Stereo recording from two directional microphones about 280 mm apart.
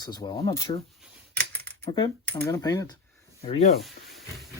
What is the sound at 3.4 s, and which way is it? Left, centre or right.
Rub, centre.